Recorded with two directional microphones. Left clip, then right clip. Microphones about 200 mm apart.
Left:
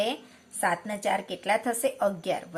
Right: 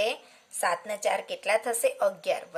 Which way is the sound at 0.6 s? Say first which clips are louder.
Even; 30° right (ahead or behind).